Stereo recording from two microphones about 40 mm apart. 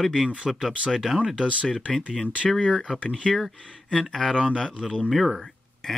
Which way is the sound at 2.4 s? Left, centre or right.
Centre.